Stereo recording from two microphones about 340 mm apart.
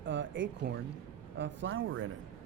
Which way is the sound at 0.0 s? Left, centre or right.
Right.